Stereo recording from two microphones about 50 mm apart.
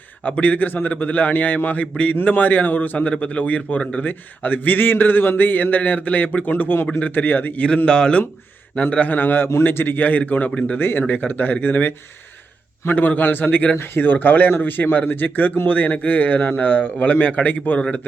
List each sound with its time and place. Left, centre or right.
0.3 s speech: left
7.9 s speech: centre
8.7 s speech: left
10.8 s speech: left
13.7 s speech: left